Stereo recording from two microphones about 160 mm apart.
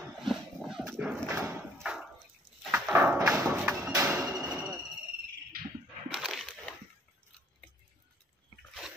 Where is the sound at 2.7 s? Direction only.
10° right (ahead or behind).